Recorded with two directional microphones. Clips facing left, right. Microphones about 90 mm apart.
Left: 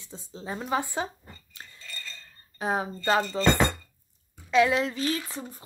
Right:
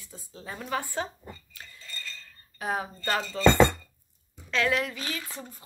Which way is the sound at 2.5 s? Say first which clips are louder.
Left 3 dB; 25° left (ahead or behind).